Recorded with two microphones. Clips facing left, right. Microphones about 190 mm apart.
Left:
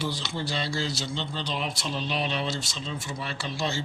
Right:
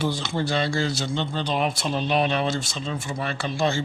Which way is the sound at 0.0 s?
55° right (ahead or behind).